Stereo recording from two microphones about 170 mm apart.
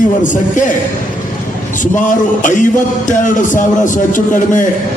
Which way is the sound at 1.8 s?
50° left (ahead or behind).